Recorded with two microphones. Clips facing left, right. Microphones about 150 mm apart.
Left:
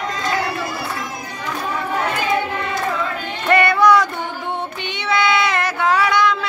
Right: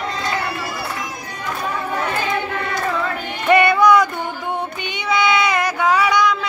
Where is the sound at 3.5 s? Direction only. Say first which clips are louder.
Right 1 dB; centre (ahead or behind).